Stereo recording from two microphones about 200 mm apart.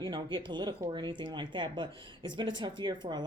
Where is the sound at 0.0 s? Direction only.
25° right (ahead or behind).